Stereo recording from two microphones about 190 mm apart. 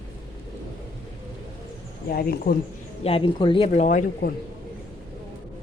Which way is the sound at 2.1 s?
50° left (ahead or behind).